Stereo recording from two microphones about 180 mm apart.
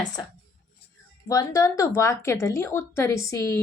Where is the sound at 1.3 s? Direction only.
20° left (ahead or behind).